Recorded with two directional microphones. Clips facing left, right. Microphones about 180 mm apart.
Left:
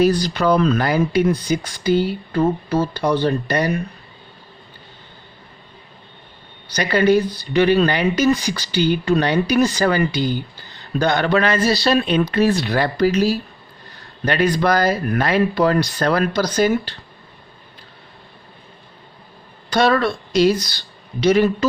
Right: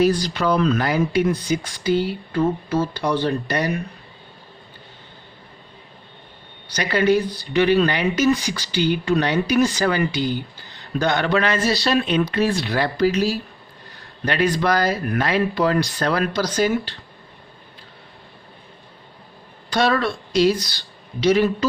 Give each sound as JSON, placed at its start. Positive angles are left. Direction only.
{"t": 0.0, "sound": "speech", "side_deg": 40}
{"t": 6.7, "sound": "speech", "side_deg": 40}
{"t": 21.2, "sound": "speech", "side_deg": 50}